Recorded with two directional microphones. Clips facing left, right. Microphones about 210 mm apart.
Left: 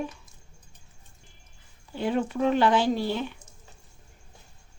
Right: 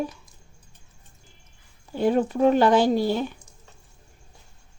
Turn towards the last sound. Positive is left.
turn(degrees=-40)  # may be behind; listen again after turning